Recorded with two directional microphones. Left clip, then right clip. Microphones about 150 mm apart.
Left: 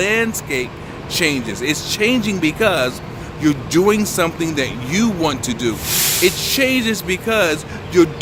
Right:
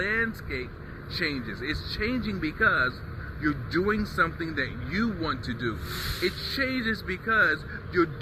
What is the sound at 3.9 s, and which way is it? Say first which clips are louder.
Speech: left 8 dB; 45° left (ahead or behind).